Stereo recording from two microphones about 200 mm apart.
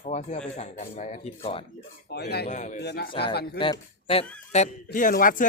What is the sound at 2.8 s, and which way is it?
Speech, 55° left (ahead or behind).